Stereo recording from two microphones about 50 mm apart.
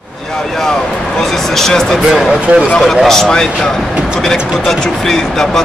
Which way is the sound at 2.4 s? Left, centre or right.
Right.